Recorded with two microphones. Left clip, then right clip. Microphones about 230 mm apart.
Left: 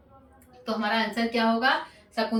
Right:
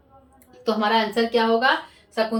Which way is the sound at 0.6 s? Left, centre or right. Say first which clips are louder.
Right 6 dB; right.